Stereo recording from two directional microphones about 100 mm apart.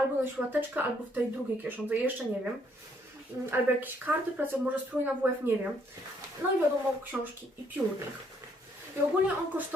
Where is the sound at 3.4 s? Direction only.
20° right (ahead or behind).